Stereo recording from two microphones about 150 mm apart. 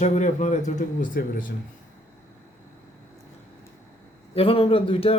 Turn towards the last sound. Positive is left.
turn(degrees=40)  # may be behind; listen again after turning